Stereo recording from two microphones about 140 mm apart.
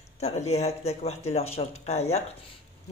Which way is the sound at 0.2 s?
50° left (ahead or behind).